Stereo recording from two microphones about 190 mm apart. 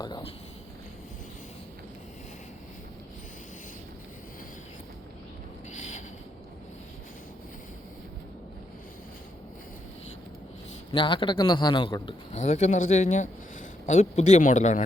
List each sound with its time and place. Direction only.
0.0 s speech: 20° left (ahead or behind)
5.7 s a sound: 40° left (ahead or behind)
10.9 s a man's voice: 25° left (ahead or behind)
12.4 s speech: 35° left (ahead or behind)